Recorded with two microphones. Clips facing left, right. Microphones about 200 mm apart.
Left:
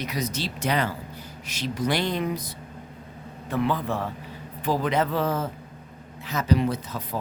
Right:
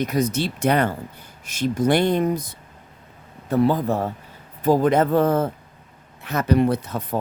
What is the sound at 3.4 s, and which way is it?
A man's voice, 40° right (ahead or behind).